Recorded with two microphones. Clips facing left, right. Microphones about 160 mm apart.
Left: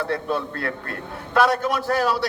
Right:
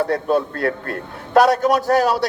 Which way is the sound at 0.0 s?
40° right (ahead or behind).